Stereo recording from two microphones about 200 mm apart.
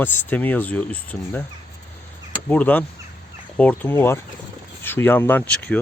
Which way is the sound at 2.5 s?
10° left (ahead or behind).